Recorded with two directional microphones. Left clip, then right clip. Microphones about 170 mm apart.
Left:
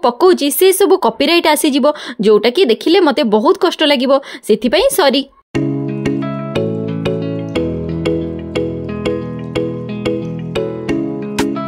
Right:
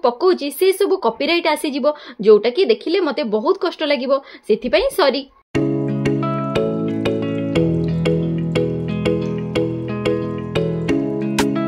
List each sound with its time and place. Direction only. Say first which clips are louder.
0.0 s speech: left 5 dB; 45° left (ahead or behind)
7.1 s music: left 3 dB; centre (ahead or behind)
10.0 s music: left 1 dB; centre (ahead or behind)